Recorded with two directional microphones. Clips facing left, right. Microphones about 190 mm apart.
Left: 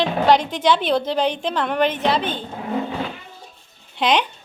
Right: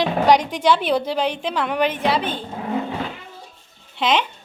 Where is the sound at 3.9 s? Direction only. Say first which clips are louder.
Left 1 dB; centre (ahead or behind).